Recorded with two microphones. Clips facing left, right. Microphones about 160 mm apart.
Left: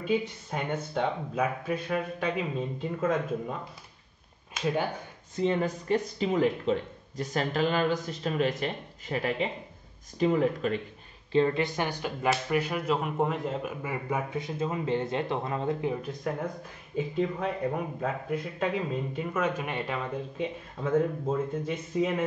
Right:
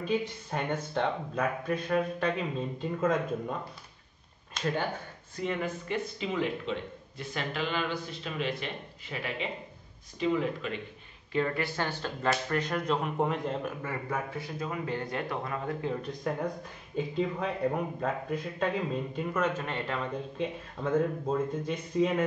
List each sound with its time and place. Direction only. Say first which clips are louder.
0.0 s speech: left 2 dB; 5° left (ahead or behind)
4.6 s speech: left 3 dB; 10° left (ahead or behind)
5.3 s speech: left 5 dB; 30° left (ahead or behind); by 10.8 s 45° left (ahead or behind)
11.3 s speech: left 5 dB; 20° left (ahead or behind)
15.9 s a man's voice: left 1 dB; 5° left (ahead or behind)